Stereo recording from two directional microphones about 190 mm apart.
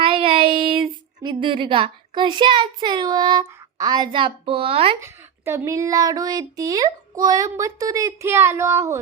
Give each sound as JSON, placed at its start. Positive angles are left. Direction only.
{"t": 0.0, "sound": "child singing", "side_deg": -30}
{"t": 5.0, "sound": "speech", "side_deg": -15}